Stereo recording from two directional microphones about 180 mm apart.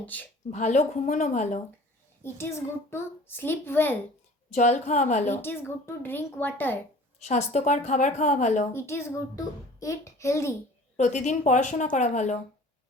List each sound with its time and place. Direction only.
0.0 s a child's voice: 10° left (ahead or behind)
0.5 s a woman's voice: 45° left (ahead or behind)
2.2 s a child's voice: 15° left (ahead or behind)
4.5 s a woman's voice: 40° left (ahead or behind)
5.3 s a child's voice: 10° left (ahead or behind)
7.3 s a woman's voice: 40° left (ahead or behind)
8.7 s a child's voice: 15° left (ahead or behind)
10.9 s a woman's voice: 40° left (ahead or behind)